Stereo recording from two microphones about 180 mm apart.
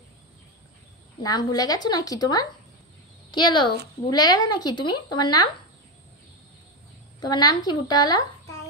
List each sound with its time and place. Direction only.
1.2 s a woman's voice: 20° left (ahead or behind)
7.2 s speech: 20° left (ahead or behind)